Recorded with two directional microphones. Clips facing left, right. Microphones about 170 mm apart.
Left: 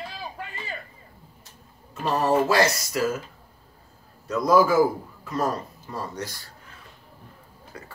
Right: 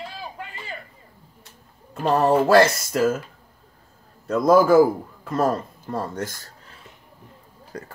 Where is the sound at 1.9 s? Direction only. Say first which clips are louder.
Right 4 dB; 55° right (ahead or behind).